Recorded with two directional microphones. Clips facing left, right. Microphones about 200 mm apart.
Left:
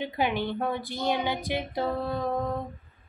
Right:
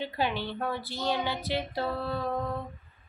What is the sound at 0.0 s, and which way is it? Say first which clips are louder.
Female singing: left 3 dB; 15° left (ahead or behind).